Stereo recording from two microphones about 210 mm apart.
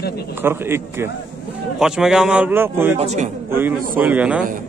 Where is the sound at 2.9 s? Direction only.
35° right (ahead or behind).